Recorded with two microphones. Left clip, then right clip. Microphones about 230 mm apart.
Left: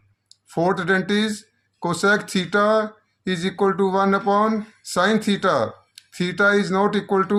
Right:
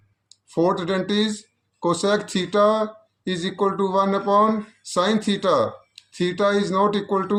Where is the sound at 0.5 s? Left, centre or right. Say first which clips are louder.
Left 1 dB; left.